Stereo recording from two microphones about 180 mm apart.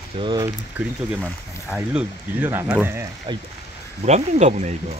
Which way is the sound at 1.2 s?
15° left (ahead or behind).